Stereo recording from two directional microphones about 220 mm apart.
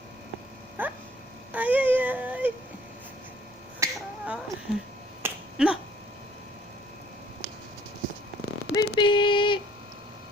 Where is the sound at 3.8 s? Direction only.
5° right (ahead or behind).